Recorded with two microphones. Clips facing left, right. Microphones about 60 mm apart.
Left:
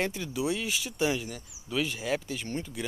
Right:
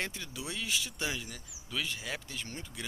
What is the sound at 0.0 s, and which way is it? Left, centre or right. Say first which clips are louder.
Speech: left 9 dB; centre.